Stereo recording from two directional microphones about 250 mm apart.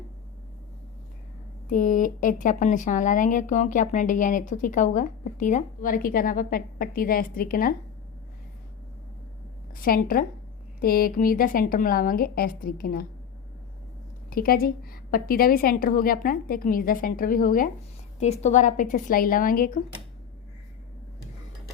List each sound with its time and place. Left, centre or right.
1.7 s speech: left
9.8 s speech: left
14.3 s speech: left